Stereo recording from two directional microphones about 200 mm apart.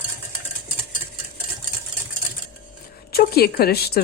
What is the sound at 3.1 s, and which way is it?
Speech, 50° left (ahead or behind).